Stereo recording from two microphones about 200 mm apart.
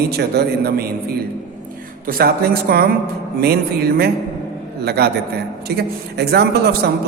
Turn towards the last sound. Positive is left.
turn(degrees=-55)  # may be behind; listen again after turning